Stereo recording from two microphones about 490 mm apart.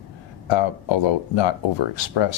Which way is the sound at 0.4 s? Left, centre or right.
Left.